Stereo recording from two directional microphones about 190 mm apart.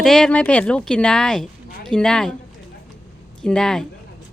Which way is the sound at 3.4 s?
5° left (ahead or behind).